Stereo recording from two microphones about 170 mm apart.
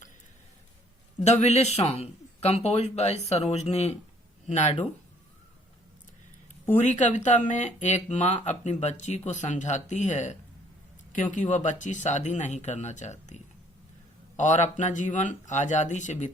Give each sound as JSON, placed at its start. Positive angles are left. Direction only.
{"t": 1.2, "sound": "speech", "side_deg": 40}
{"t": 6.7, "sound": "speech", "side_deg": 45}